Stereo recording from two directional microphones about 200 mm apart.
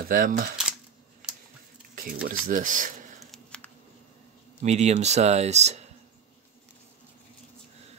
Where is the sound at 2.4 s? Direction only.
40° right (ahead or behind).